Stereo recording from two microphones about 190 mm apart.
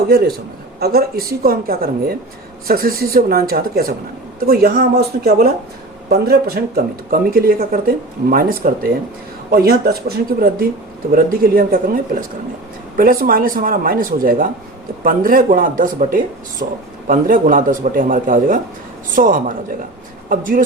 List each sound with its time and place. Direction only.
0.1 s a man's voice: 55° right (ahead or behind)
13.0 s speech: 50° right (ahead or behind)